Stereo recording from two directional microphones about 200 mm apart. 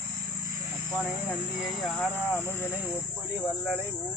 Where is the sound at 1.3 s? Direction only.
Centre (ahead or behind).